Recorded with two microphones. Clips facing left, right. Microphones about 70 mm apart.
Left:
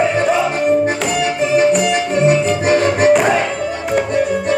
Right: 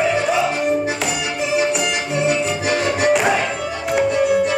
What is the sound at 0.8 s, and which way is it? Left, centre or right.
Music, left.